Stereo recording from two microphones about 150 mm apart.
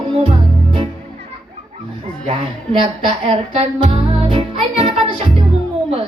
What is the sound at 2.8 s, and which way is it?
Speech, 35° right (ahead or behind).